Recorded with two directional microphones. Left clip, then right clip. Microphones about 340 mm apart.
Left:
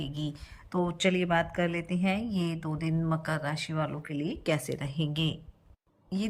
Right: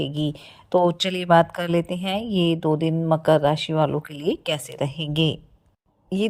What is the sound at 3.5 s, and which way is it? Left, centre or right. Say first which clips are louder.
A woman's voice: right 12 dB; centre.